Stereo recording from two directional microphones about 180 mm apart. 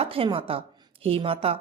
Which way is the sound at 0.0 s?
30° right (ahead or behind).